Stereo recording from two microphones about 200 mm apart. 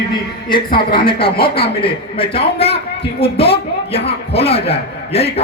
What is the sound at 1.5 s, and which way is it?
A man's voice, 30° left (ahead or behind).